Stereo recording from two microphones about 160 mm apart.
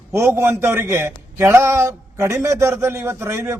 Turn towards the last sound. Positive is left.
turn(degrees=-15)  # may be behind; listen again after turning